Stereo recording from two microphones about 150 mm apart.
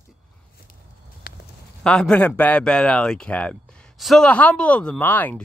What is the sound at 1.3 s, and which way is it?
Clip-clop, 80° left.